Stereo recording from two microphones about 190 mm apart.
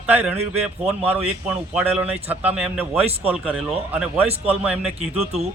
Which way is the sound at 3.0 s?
30° right (ahead or behind).